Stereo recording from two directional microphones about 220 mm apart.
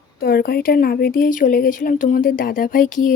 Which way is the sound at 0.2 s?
45° left (ahead or behind).